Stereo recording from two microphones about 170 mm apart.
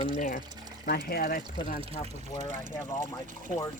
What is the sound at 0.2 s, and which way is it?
Speech, 55° left (ahead or behind).